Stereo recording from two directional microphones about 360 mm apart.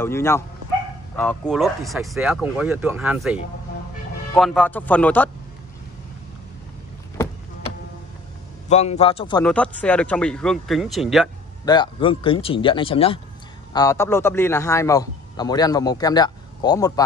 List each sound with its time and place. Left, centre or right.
0.0 s a man's voice: centre
4.4 s a man's voice: centre
8.6 s a man's voice: centre
11.6 s a man's voice: centre